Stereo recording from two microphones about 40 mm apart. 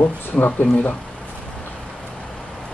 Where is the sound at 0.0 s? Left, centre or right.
Left.